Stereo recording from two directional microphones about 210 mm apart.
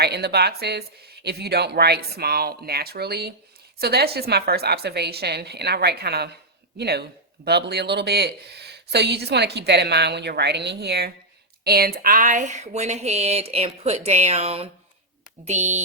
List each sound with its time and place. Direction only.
0.0 s speech: 50° right (ahead or behind); by 15.8 s 35° right (ahead or behind)